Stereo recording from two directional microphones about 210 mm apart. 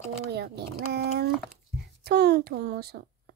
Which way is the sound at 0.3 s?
50° right (ahead or behind).